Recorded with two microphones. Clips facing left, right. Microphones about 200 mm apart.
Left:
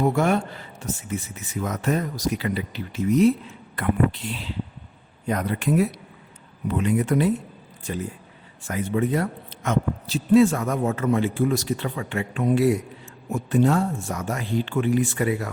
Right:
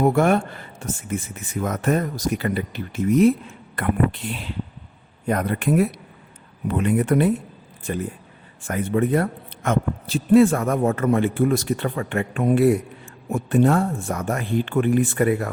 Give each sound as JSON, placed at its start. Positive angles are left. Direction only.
{"t": 0.0, "sound": "a man's voice", "side_deg": -55}
{"t": 8.6, "sound": "a man's voice", "side_deg": -55}